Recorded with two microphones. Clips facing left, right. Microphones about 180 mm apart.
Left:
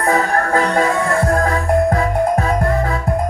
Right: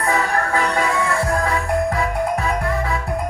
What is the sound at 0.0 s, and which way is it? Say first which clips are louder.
Music: left 4 dB; 45° left (ahead or behind).